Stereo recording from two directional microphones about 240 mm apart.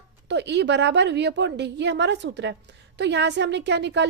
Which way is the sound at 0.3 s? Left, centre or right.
Right.